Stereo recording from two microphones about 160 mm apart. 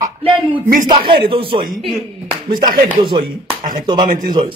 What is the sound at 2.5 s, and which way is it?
Speech, 60° right (ahead or behind).